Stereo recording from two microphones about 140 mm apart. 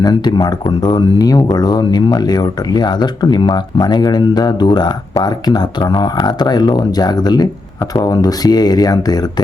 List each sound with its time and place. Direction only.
0.0 s speech: 30° left (ahead or behind)